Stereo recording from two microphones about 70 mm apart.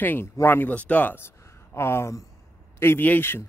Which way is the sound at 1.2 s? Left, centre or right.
Left.